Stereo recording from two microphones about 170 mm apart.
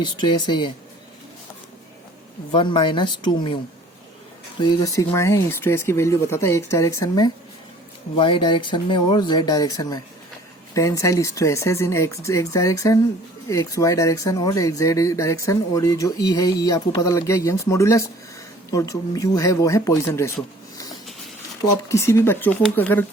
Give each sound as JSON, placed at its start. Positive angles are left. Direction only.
{"t": 0.0, "sound": "speech", "side_deg": 25}
{"t": 2.5, "sound": "speech", "side_deg": 30}
{"t": 4.8, "sound": "speech", "side_deg": 20}
{"t": 8.1, "sound": "speech", "side_deg": 30}
{"t": 21.8, "sound": "speech", "side_deg": 15}